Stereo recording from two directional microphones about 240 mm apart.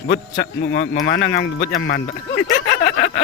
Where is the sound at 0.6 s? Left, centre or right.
Left.